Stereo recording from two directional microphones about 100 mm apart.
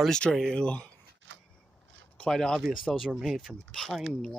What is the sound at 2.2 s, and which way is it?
Speech, 5° left (ahead or behind).